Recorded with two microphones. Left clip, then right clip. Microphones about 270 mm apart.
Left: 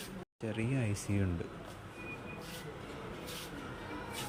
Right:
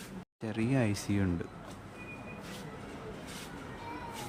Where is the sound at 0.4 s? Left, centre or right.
Centre.